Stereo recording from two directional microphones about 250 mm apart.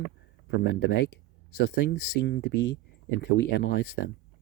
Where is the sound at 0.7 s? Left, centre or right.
Left.